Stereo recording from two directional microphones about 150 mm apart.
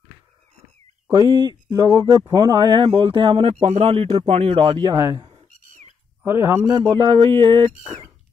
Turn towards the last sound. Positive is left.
turn(degrees=-40)  # may be behind; listen again after turning